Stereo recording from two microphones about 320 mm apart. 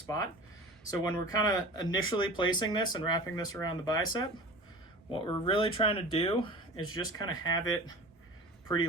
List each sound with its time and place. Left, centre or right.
0.9 s speech: centre